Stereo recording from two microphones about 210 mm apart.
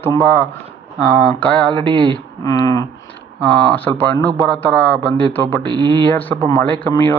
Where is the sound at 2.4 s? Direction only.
15° left (ahead or behind).